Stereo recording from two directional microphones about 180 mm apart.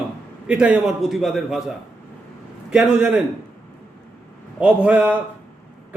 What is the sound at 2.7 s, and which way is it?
Speech, 5° right (ahead or behind).